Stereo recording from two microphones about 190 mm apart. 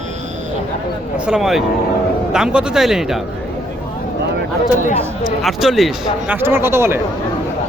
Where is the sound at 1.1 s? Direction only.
5° right (ahead or behind).